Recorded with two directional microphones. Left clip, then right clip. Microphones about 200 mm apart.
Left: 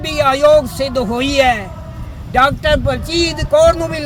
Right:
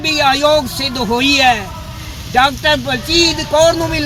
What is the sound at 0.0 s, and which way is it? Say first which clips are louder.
A man's voice: even; 25° left (ahead or behind).